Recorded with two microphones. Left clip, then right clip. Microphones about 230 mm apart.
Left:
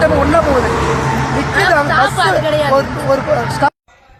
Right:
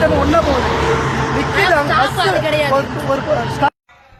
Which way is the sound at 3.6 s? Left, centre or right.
Centre.